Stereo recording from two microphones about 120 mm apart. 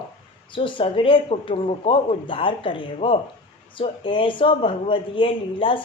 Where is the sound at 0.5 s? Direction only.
45° left (ahead or behind).